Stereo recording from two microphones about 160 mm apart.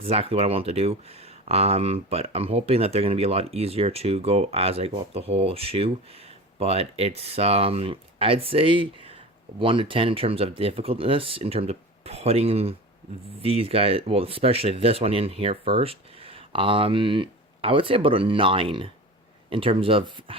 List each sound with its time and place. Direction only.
0.1 s speech: 35° right (ahead or behind)